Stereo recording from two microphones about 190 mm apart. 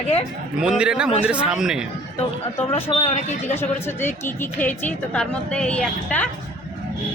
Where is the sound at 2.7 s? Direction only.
30° left (ahead or behind).